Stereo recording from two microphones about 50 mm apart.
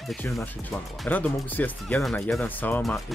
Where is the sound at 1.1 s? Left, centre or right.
Left.